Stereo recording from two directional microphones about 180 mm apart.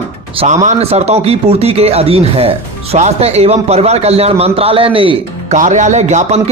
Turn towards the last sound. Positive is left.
turn(degrees=-40)  # may be behind; listen again after turning